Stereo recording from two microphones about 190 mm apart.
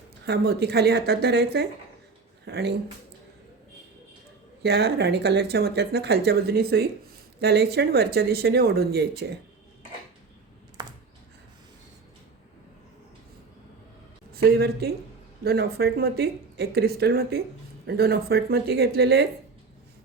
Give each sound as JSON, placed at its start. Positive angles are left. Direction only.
{"t": 0.3, "sound": "speech", "side_deg": -60}
{"t": 4.6, "sound": "speech", "side_deg": -60}
{"t": 10.8, "sound": "computer keyboard", "side_deg": -20}
{"t": 14.3, "sound": "speech", "side_deg": -55}